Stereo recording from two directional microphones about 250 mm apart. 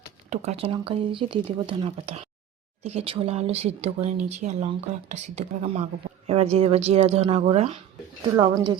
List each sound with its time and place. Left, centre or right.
0.3 s speech: right